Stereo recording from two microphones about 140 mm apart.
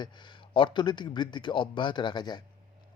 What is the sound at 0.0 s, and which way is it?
Speech, 35° left (ahead or behind).